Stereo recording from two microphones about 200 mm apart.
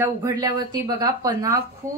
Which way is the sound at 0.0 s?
15° right (ahead or behind).